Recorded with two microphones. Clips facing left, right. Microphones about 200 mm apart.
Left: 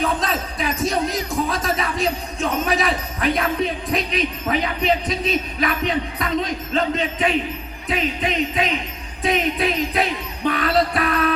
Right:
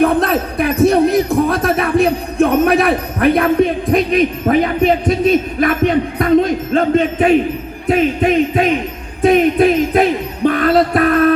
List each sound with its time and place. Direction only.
0.0 s jingle bell: 55° right (ahead or behind)
7.9 s music: 50° right (ahead or behind)